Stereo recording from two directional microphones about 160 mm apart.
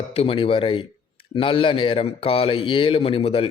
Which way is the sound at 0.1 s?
35° left (ahead or behind).